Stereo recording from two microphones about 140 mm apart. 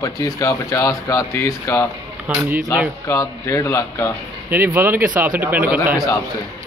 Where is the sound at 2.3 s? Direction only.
10° right (ahead or behind).